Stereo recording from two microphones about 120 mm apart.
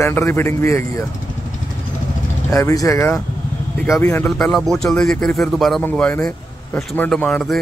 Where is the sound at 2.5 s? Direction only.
25° left (ahead or behind).